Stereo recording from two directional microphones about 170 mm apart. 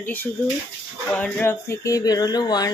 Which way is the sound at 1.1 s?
10° left (ahead or behind).